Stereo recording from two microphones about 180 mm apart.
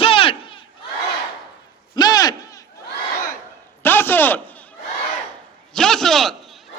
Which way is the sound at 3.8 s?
10° left (ahead or behind).